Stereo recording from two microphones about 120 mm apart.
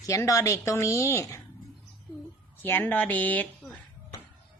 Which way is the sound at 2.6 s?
15° left (ahead or behind).